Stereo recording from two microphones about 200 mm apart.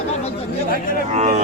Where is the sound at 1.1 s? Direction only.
35° right (ahead or behind).